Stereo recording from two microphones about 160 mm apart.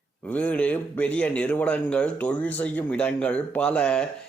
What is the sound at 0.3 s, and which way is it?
A man's voice, 10° left (ahead or behind).